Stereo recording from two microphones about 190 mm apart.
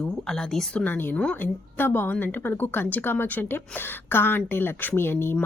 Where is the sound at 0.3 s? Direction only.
5° left (ahead or behind).